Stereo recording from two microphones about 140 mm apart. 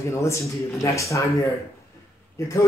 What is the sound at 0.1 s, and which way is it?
Speech, 20° left (ahead or behind).